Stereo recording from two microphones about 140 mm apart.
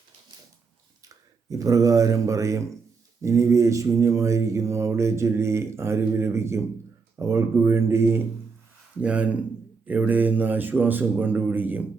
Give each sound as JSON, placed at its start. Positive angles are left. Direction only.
{"t": 1.0, "sound": "speech", "side_deg": -25}
{"t": 3.2, "sound": "mantra", "side_deg": -20}
{"t": 9.0, "sound": "speech", "side_deg": -10}